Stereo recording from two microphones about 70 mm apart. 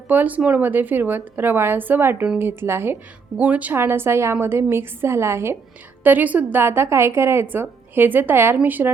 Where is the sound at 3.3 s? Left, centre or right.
Right.